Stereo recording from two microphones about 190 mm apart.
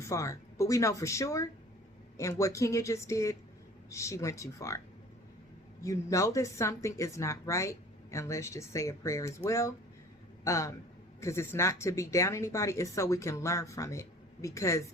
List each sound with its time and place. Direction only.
0.0 s a woman's voice: 15° left (ahead or behind)
5.8 s a woman's voice: 15° left (ahead or behind)